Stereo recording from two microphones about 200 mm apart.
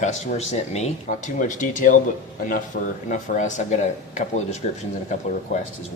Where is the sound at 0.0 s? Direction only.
35° left (ahead or behind).